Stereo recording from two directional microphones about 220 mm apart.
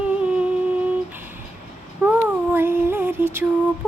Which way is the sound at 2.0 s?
10° right (ahead or behind).